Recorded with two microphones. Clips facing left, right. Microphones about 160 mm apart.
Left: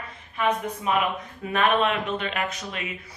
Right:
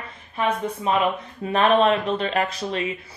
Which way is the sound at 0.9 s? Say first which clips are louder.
Right 3 dB; 30° right (ahead or behind).